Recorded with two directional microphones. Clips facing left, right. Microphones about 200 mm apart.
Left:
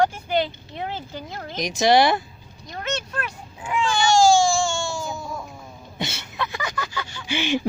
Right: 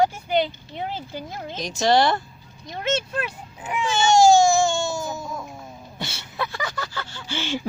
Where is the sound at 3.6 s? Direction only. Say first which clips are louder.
Left 1 dB; 20° right (ahead or behind).